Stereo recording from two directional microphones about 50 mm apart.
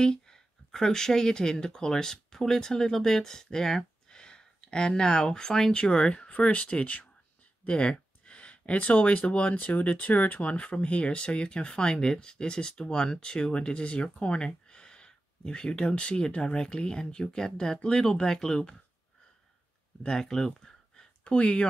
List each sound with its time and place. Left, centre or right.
0.0 s a sound: centre
0.7 s speech: centre
20.0 s speech: centre